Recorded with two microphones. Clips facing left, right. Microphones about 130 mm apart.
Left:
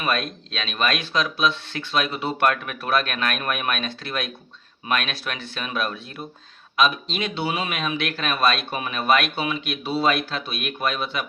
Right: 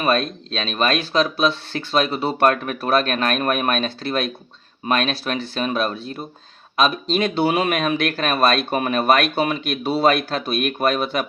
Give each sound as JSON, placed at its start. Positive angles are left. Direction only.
{"t": 0.0, "sound": "speech", "side_deg": -35}